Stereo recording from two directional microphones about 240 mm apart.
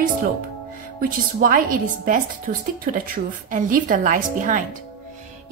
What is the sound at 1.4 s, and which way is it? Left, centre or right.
Speech, right.